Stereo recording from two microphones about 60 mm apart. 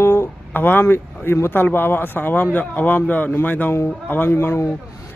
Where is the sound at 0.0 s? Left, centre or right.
Left.